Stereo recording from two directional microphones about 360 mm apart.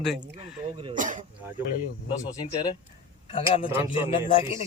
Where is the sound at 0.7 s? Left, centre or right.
Centre.